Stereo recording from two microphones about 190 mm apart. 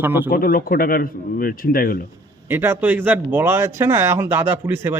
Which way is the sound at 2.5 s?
10° right (ahead or behind).